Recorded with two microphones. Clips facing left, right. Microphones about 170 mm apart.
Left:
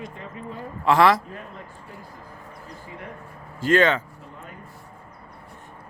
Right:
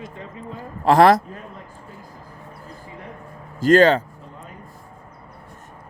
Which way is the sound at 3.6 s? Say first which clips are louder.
Right 5 dB; 35° right (ahead or behind).